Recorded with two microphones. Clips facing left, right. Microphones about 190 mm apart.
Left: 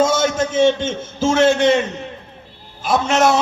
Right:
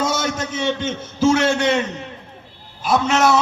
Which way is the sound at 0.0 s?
50° left (ahead or behind).